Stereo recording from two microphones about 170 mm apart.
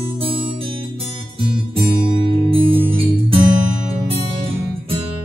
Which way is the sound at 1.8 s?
30° right (ahead or behind).